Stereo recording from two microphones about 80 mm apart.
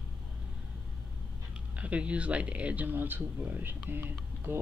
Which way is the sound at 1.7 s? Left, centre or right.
Centre.